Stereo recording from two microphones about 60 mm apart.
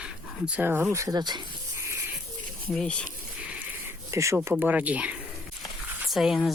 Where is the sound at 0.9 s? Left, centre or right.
Right.